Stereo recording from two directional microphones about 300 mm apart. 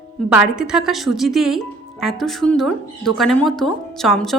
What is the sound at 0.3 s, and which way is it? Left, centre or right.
Speech, centre.